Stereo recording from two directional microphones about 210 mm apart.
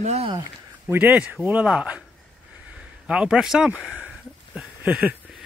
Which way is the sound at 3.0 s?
5° right (ahead or behind).